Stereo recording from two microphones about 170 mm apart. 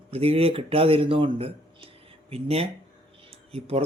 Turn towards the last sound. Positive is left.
turn(degrees=-35)  # may be behind; listen again after turning